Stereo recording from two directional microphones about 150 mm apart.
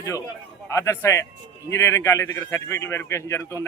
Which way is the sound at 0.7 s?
20° left (ahead or behind).